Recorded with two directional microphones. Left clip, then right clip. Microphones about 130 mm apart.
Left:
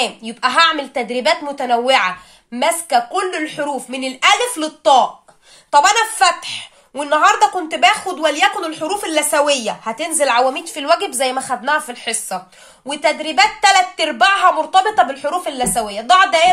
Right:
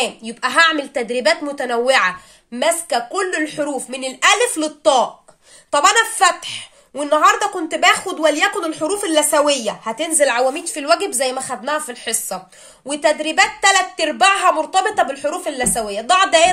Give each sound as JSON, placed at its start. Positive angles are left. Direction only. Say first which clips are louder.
{"t": 0.0, "sound": "a woman's voice", "louder": "left 2 dB", "side_deg": -35}
{"t": 5.7, "sound": "a woman's voice", "louder": "left 2 dB", "side_deg": -35}